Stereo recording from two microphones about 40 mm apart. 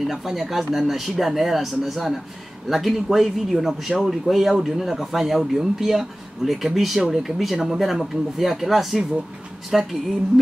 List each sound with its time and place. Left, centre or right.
0.0 s speech: centre